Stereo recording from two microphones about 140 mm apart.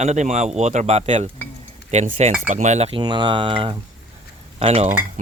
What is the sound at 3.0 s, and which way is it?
Speech, 35° right (ahead or behind).